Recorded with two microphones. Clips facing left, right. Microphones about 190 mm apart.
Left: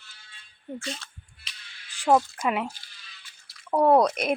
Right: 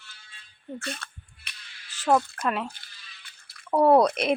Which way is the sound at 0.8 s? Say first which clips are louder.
Even; 55° right (ahead or behind).